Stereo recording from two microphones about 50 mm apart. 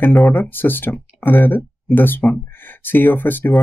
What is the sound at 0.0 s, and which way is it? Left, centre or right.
Speech, left.